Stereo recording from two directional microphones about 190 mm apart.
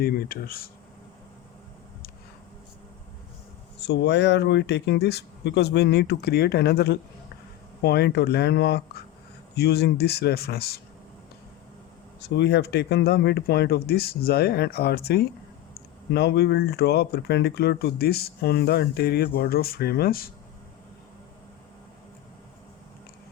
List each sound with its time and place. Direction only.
0.0 s speech: 50° left (ahead or behind)
3.8 s speech: 65° left (ahead or behind)
12.3 s speech: 65° left (ahead or behind)